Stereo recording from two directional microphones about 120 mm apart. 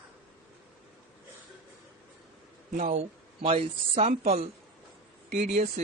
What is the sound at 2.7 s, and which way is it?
Speech, 75° right (ahead or behind).